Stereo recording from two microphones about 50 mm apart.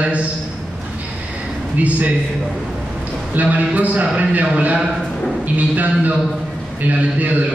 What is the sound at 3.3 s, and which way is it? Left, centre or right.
A man's voice, right.